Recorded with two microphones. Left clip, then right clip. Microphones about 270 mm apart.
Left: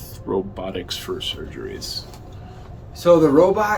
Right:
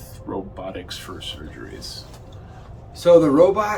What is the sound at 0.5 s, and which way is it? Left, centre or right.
Speech, left.